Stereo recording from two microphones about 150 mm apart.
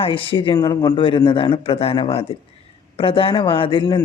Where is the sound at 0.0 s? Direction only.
35° left (ahead or behind).